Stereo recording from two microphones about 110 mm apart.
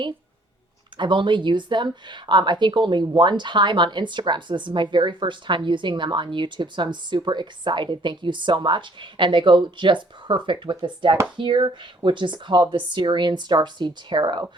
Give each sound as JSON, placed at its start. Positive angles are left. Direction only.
{"t": 0.9, "sound": "speech", "side_deg": -45}